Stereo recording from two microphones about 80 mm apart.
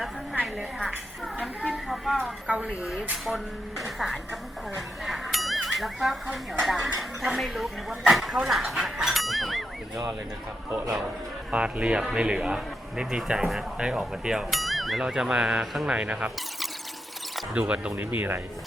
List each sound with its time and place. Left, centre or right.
0.4 s speech: centre
11.5 s speech: centre
17.5 s speech: centre
18.2 s speech: right